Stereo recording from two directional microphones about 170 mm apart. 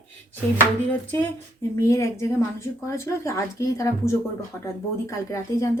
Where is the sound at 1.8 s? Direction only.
15° left (ahead or behind).